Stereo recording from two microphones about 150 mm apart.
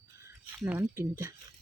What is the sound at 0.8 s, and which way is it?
Speech, 20° right (ahead or behind).